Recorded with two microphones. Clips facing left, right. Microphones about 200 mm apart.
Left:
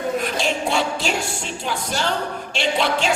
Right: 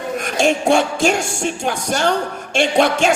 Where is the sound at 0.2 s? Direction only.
45° right (ahead or behind).